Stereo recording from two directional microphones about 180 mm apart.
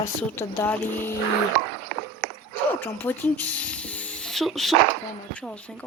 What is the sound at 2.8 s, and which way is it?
Speech, 10° left (ahead or behind).